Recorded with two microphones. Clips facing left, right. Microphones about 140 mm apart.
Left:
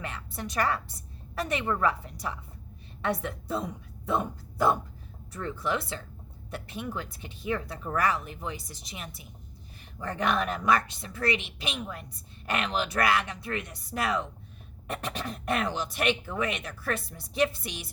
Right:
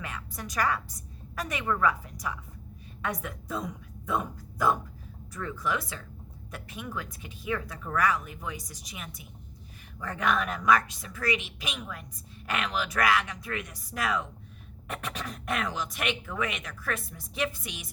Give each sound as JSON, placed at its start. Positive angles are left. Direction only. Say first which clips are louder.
{"t": 0.0, "sound": "a woman's voice", "louder": "left 2 dB", "side_deg": 30}